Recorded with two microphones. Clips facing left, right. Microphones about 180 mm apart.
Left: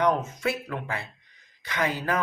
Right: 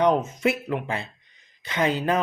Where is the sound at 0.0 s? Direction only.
20° right (ahead or behind).